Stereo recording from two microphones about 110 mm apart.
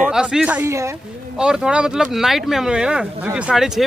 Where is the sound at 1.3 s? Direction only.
5° right (ahead or behind).